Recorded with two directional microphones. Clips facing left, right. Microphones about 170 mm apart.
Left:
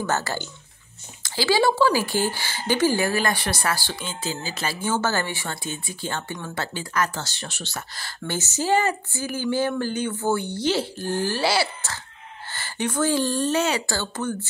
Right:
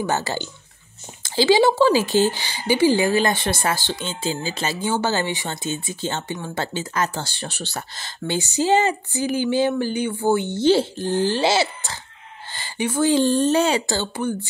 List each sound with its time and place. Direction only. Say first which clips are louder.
0.0 s speech: right 2 dB; 15° right (ahead or behind); by 8.0 s 30° right (ahead or behind)
8.0 s speech: right 5 dB; 15° right (ahead or behind)
12.4 s fowl: right 2 dB; 15° right (ahead or behind)
13.1 s speech: right 5 dB; 25° right (ahead or behind)